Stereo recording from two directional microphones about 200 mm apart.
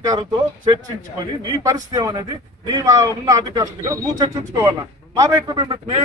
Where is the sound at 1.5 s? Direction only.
15° right (ahead or behind).